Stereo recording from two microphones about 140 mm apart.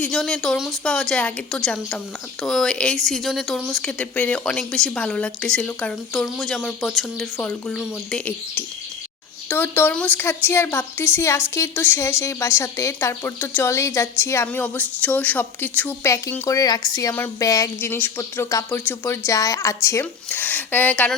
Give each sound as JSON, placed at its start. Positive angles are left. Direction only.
{"t": 0.0, "sound": "a woman's voice", "side_deg": 5}